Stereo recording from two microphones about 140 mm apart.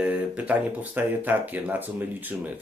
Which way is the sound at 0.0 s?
10° right (ahead or behind).